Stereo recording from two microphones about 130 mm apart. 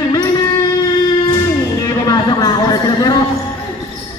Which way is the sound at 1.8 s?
30° left (ahead or behind).